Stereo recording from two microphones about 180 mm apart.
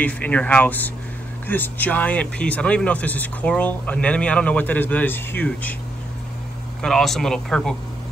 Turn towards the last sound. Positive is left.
turn(degrees=5)  # may be behind; listen again after turning